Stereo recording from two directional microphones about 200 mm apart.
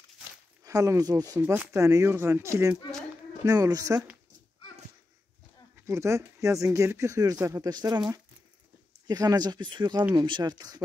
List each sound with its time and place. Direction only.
0.7 s speech: 15° right (ahead or behind)
5.9 s speech: 15° right (ahead or behind)
9.0 s speech: 20° right (ahead or behind)